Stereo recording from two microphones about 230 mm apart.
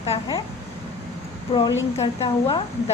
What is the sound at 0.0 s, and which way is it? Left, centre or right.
Speech, left.